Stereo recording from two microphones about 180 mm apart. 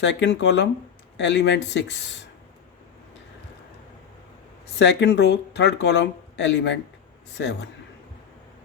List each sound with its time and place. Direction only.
0.0 s speech: 80° left
4.8 s speech: 70° left (ahead or behind)